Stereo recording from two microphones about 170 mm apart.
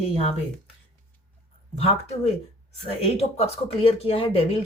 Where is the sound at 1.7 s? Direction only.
35° left (ahead or behind).